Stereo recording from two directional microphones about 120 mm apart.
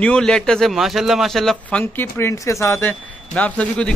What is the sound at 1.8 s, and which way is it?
Speech, 15° left (ahead or behind).